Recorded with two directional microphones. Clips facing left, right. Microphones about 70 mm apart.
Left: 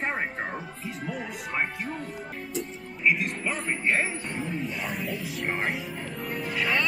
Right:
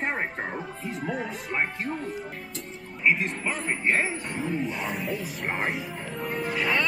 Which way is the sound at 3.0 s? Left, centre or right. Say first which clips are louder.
Right 1 dB; right.